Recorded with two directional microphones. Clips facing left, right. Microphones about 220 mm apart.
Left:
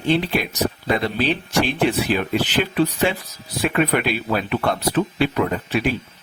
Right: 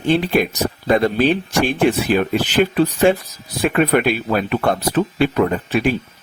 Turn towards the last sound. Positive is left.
turn(degrees=-45)  # may be behind; listen again after turning